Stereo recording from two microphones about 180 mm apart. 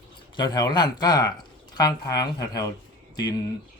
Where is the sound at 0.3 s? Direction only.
25° left (ahead or behind).